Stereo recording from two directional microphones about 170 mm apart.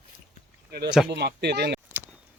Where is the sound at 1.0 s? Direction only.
80° right.